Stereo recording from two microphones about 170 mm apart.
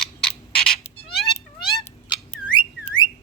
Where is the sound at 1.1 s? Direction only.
Centre (ahead or behind).